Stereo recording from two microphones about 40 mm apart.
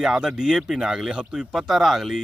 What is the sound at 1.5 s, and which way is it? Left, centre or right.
Speech, centre.